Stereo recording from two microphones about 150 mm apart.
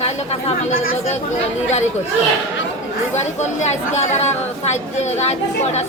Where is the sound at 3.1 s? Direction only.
50° left (ahead or behind).